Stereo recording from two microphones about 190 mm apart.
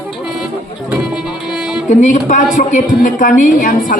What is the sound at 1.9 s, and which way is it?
A woman's voice, 40° left (ahead or behind).